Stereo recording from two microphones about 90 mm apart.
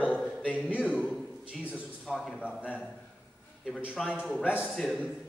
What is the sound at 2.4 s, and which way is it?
Speech, 10° right (ahead or behind).